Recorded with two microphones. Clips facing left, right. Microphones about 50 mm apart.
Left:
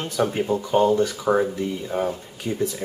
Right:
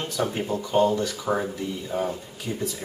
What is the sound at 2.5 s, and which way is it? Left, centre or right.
Speech, left.